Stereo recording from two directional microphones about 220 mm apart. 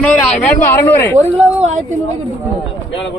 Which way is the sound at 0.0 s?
5° left (ahead or behind).